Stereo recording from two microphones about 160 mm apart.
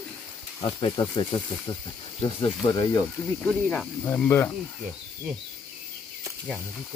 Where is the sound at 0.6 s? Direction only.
30° left (ahead or behind).